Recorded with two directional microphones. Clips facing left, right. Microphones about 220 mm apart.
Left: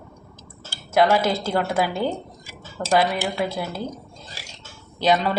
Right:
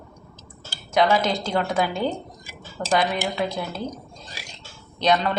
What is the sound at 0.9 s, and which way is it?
A woman's voice, 5° left (ahead or behind).